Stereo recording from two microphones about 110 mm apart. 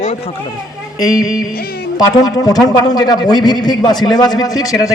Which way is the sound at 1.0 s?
35° left (ahead or behind).